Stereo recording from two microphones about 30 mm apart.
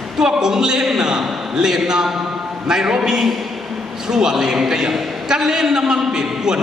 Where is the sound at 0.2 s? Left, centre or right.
Centre.